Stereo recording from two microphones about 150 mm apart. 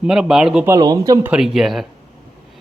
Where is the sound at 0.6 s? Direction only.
25° right (ahead or behind).